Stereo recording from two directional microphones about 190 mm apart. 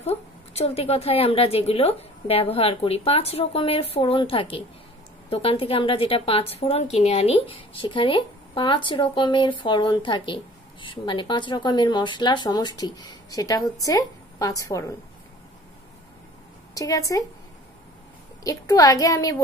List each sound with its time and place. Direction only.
0.0 s a woman's voice: 35° left (ahead or behind); by 15.0 s 15° left (ahead or behind)
16.7 s a woman's voice: 15° left (ahead or behind)
18.4 s a woman's voice: 20° left (ahead or behind)